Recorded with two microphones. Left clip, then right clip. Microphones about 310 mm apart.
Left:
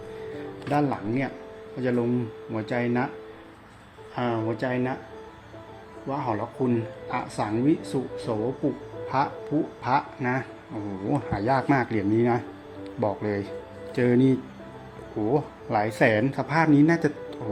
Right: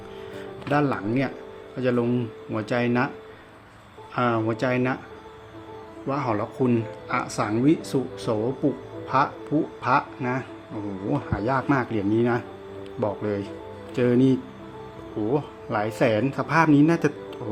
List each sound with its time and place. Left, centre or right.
0.7 s speech: centre
4.1 s speech: centre
6.1 s speech: right; by 17.0 s centre